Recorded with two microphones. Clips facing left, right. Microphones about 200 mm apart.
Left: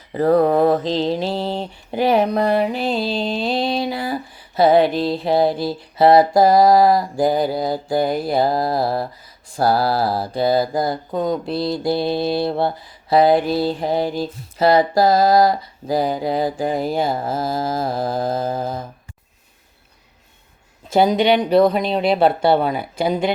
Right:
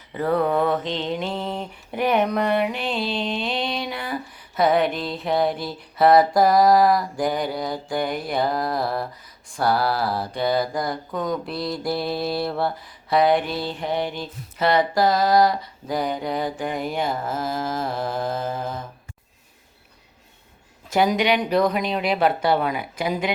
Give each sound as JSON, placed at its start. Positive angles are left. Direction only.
{"t": 0.1, "sound": "mantra", "side_deg": 35}
{"t": 20.9, "sound": "speech", "side_deg": 30}